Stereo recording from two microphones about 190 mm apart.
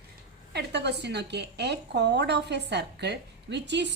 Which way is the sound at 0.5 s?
65° right (ahead or behind).